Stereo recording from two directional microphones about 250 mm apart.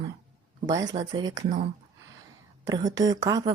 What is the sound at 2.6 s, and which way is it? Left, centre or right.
Speech, centre.